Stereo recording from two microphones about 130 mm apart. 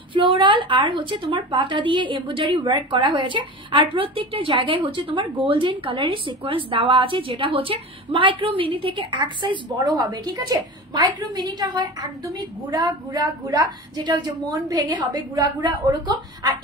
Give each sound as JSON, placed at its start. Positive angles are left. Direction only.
{"t": 0.1, "sound": "a woman's voice", "side_deg": -40}